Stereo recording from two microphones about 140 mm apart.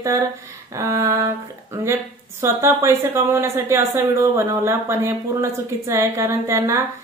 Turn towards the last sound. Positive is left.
turn(degrees=-20)  # may be behind; listen again after turning